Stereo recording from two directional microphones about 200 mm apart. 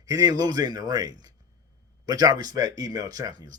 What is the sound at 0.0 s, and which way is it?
Speech, 20° right (ahead or behind).